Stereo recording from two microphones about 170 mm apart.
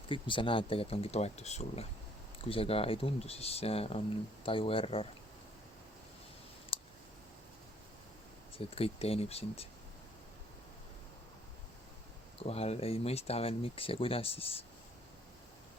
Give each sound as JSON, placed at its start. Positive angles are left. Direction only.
{"t": 0.1, "sound": "speech", "side_deg": 30}
{"t": 6.7, "sound": "a sound", "side_deg": 35}
{"t": 8.5, "sound": "speech", "side_deg": 35}
{"t": 12.4, "sound": "speech", "side_deg": 35}